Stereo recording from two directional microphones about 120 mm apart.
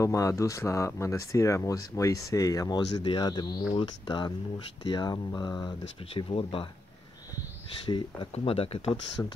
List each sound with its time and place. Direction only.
0.0 s speech: 25° left (ahead or behind); by 6.7 s 50° left (ahead or behind)
7.8 s speech: 45° left (ahead or behind)
9.2 s speech: 15° left (ahead or behind)